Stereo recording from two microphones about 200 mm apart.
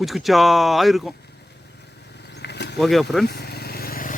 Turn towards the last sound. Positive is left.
turn(degrees=45)  # may be behind; listen again after turning